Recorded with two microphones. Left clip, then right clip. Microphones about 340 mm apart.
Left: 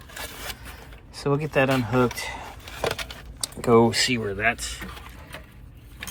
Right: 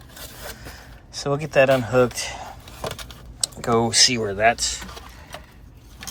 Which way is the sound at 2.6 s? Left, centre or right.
Centre.